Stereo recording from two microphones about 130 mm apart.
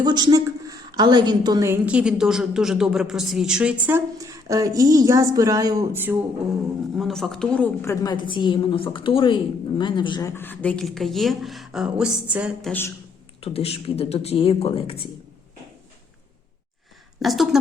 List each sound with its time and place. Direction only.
0.0 s a woman's voice: 35° right (ahead or behind)
1.6 s a woman's voice: 15° right (ahead or behind)
4.2 s speech: 25° right (ahead or behind)
5.9 s speech: 15° right (ahead or behind)
6.9 s a woman's voice: centre (ahead or behind)
7.9 s a woman's voice: 30° left (ahead or behind)
10.2 s a woman's voice: 15° left (ahead or behind); by 12.5 s 10° right (ahead or behind)
13.4 s speech: 50° left (ahead or behind)
17.2 s a woman's voice: centre (ahead or behind)